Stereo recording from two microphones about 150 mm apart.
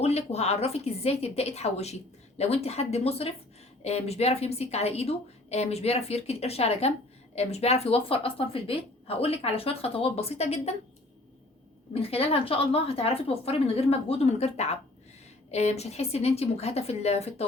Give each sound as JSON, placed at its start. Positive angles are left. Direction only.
{"t": 0.0, "sound": "a woman's voice", "side_deg": 45}
{"t": 11.9, "sound": "a woman's voice", "side_deg": 40}